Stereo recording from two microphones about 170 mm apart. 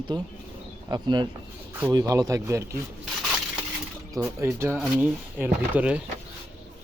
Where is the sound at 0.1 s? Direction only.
25° right (ahead or behind).